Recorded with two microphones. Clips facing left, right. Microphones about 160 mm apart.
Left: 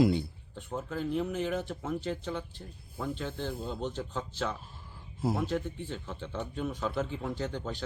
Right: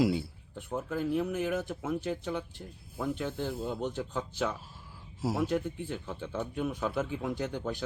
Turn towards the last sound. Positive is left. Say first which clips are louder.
# right 1 dB
turn(degrees=-10)  # may be behind; listen again after turning